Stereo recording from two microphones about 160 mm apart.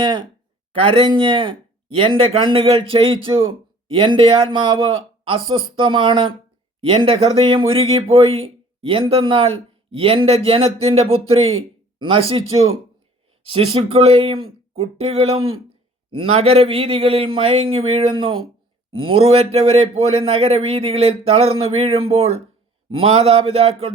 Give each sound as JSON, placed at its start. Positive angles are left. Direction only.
{"t": 0.0, "sound": "speech", "side_deg": -30}
{"t": 13.4, "sound": "speech", "side_deg": -35}